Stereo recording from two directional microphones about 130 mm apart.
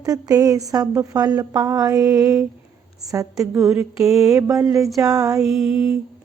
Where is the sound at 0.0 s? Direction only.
30° right (ahead or behind).